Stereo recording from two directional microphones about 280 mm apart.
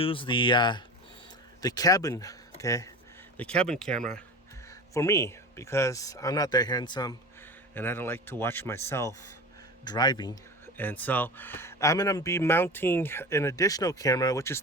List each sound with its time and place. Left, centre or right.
0.0 s speech: centre